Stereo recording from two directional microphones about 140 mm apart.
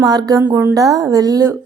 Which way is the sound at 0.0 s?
30° right (ahead or behind).